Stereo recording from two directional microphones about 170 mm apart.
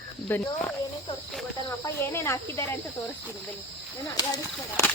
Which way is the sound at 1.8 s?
15° left (ahead or behind).